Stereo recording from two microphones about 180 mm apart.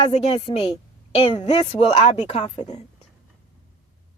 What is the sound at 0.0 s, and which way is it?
A woman's voice, 35° left (ahead or behind).